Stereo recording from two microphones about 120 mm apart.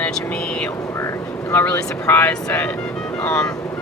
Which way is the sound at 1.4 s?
15° left (ahead or behind).